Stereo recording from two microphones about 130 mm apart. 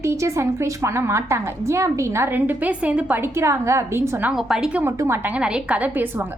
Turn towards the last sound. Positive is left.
turn(degrees=-15)  # may be behind; listen again after turning